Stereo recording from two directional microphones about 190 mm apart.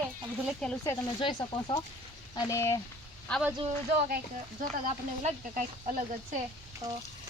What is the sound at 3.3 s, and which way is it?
Speech, 5° left (ahead or behind).